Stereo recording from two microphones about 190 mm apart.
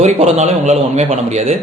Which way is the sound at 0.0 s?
35° right (ahead or behind).